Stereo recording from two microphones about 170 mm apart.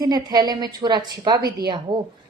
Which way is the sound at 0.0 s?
25° right (ahead or behind).